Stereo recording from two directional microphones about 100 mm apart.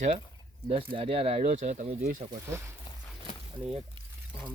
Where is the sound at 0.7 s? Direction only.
70° right (ahead or behind); by 2.0 s 90° right.